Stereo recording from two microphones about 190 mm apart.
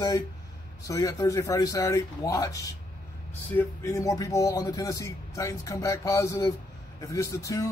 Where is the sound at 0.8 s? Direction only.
15° left (ahead or behind).